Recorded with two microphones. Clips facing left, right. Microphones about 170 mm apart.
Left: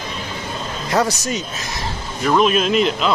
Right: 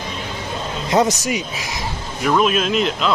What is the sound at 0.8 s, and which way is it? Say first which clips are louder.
Speech: right 2 dB; 20° right (ahead or behind).